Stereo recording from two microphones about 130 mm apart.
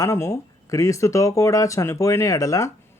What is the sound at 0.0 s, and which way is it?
Speech, 25° left (ahead or behind).